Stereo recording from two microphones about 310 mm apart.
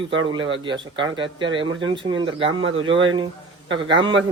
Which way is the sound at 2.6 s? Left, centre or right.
Right.